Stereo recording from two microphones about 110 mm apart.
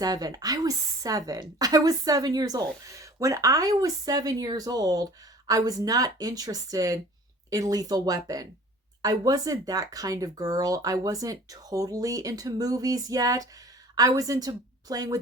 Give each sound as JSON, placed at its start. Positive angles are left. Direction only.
{"t": 0.0, "sound": "a woman's voice", "side_deg": -35}